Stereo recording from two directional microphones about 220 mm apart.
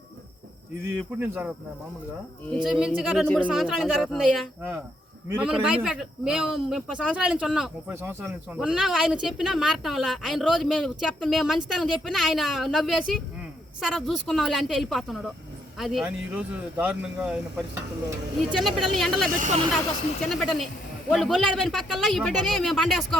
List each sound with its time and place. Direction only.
1.2 s speech: 5° right (ahead or behind)
18.5 s speech: centre (ahead or behind)
19.4 s speech: 30° right (ahead or behind)
20.2 s speech: centre (ahead or behind)